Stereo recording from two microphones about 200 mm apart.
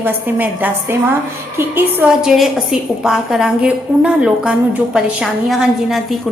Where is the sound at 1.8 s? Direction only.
5° right (ahead or behind).